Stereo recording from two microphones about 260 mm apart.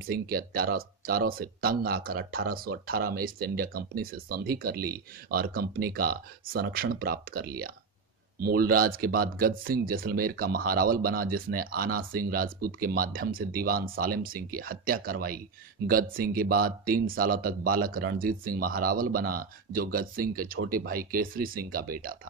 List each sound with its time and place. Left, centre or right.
0.1 s speech: right